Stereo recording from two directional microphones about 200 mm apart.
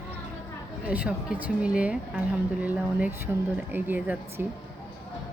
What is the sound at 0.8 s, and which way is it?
A woman's voice, 5° right (ahead or behind).